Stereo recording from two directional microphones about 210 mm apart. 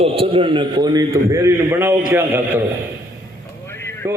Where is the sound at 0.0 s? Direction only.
25° right (ahead or behind).